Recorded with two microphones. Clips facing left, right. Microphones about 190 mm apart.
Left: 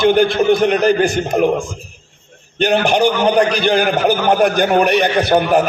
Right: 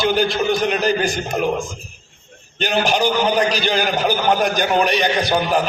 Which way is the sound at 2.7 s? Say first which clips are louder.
Left 4 dB; 55° left (ahead or behind).